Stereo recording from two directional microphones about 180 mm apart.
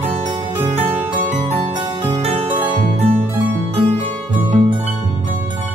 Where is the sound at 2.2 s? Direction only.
35° right (ahead or behind).